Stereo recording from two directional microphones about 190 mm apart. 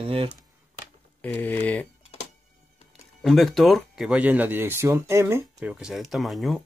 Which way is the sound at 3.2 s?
Centre (ahead or behind).